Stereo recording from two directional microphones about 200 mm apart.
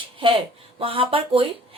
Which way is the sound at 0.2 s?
25° right (ahead or behind).